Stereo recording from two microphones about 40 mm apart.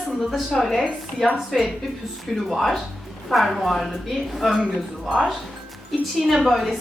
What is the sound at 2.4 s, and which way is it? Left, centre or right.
A woman's voice, centre.